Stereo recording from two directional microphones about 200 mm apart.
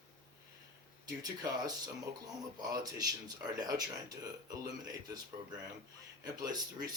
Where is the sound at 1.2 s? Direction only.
20° right (ahead or behind).